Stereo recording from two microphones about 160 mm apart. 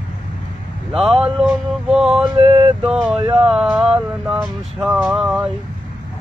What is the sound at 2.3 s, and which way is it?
Male singing, 30° right (ahead or behind).